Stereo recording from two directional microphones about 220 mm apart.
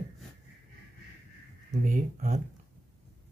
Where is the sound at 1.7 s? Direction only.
35° right (ahead or behind).